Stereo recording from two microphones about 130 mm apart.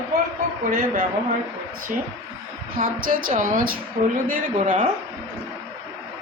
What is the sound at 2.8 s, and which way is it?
A woman's voice, 90° right.